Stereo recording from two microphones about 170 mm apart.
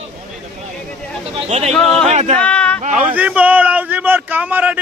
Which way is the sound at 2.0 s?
40° right (ahead or behind).